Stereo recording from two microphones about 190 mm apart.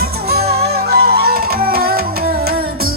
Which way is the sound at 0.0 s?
55° right (ahead or behind).